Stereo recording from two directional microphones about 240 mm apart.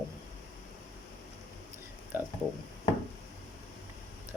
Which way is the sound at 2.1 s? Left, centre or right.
Centre.